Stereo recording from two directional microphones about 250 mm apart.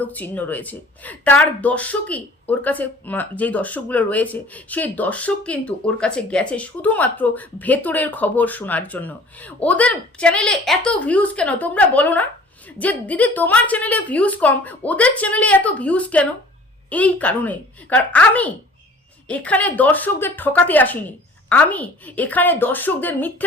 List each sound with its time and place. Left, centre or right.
0.0 s speech: centre